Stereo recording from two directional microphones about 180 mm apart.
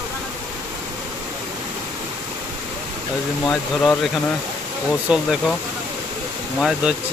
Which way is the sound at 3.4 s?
5° left (ahead or behind).